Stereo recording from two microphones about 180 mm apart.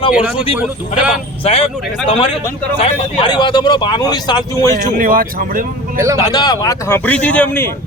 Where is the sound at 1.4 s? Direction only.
30° left (ahead or behind).